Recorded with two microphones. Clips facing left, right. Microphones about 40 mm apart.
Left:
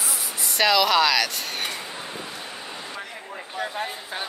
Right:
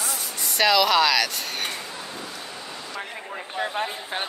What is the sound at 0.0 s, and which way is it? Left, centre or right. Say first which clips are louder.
Speech: even; centre.